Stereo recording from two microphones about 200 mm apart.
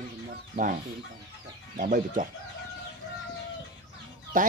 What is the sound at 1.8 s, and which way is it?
Speech, 45° right (ahead or behind).